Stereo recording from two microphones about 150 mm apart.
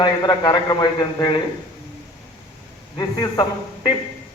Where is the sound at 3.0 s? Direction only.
25° left (ahead or behind).